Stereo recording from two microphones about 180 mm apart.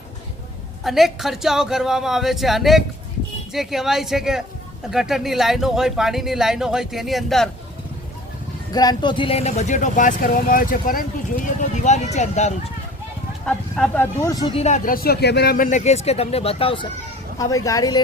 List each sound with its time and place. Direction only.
0.9 s speech: centre (ahead or behind)
8.7 s speech: 20° left (ahead or behind); by 12.5 s 40° left (ahead or behind)
13.4 s speech: 5° left (ahead or behind)
14.2 s speech: 20° left (ahead or behind)
14.5 s speech: 40° left (ahead or behind)
17.3 s speech: 20° left (ahead or behind)